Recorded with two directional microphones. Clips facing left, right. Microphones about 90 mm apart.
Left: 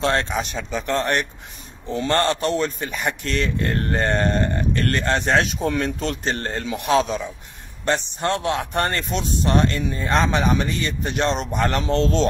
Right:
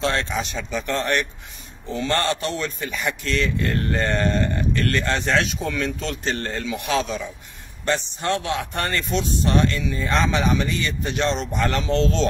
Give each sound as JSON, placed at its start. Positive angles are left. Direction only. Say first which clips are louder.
{"t": 0.0, "sound": "speech", "louder": "left 2 dB", "side_deg": 50}